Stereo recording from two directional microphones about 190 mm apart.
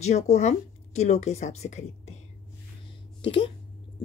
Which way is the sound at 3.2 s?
25° left (ahead or behind).